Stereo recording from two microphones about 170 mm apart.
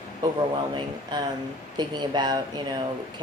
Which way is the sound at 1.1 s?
25° right (ahead or behind).